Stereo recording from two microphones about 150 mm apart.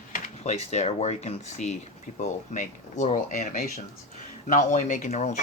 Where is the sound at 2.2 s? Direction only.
60° left (ahead or behind).